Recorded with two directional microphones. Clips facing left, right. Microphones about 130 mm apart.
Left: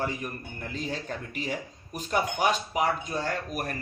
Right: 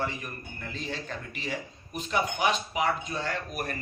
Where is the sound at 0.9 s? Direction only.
40° left (ahead or behind).